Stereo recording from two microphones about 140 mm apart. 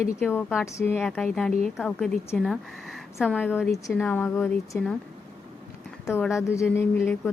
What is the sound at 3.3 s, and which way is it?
Speech, 10° left (ahead or behind).